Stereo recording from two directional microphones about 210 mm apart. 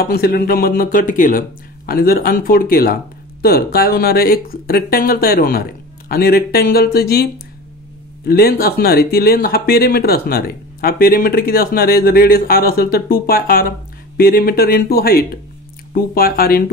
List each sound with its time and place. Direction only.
0.0 s speech: 45° left (ahead or behind)
8.3 s speech: 45° left (ahead or behind)